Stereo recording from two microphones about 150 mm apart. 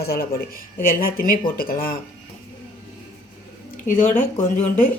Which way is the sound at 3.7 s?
60° left (ahead or behind).